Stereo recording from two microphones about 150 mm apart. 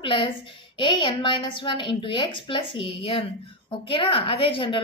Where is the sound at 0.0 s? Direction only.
35° left (ahead or behind).